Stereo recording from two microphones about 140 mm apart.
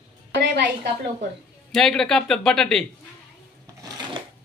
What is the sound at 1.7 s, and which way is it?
Speech, 5° left (ahead or behind).